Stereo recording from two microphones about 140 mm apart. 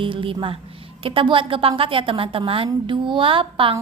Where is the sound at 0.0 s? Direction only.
40° right (ahead or behind).